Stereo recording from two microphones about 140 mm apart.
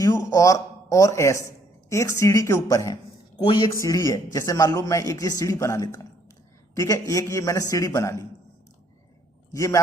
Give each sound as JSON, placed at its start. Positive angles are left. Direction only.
{"t": 0.0, "sound": "speech", "side_deg": 20}
{"t": 9.5, "sound": "a man's voice", "side_deg": 25}